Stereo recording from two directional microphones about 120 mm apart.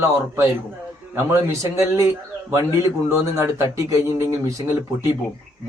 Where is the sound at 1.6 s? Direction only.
25° right (ahead or behind).